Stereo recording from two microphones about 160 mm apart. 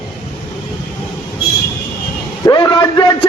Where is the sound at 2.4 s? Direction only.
30° left (ahead or behind).